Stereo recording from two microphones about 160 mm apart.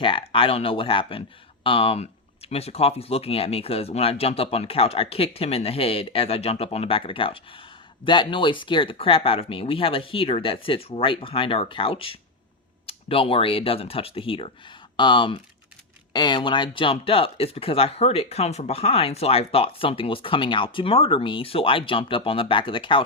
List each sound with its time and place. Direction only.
0.0 s speech: 35° left (ahead or behind)